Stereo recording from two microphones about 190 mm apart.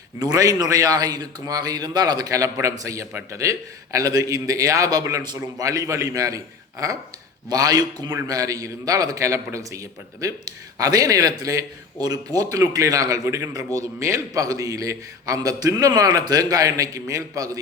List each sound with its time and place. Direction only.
0.2 s a man's voice: 20° right (ahead or behind)